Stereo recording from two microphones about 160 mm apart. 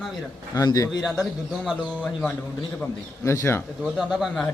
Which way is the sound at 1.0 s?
Centre (ahead or behind).